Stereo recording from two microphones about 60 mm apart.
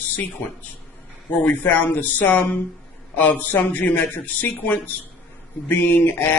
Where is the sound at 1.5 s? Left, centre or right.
Left.